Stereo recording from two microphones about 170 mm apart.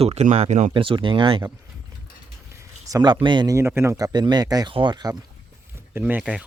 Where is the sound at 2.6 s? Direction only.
25° right (ahead or behind).